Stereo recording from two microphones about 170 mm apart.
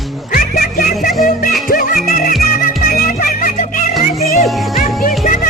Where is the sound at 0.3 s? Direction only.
55° left (ahead or behind).